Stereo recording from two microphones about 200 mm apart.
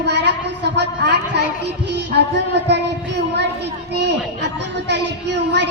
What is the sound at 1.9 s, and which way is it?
Child singing, 55° right (ahead or behind).